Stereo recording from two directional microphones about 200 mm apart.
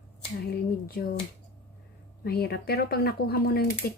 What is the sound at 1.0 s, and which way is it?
Speech, 50° left (ahead or behind).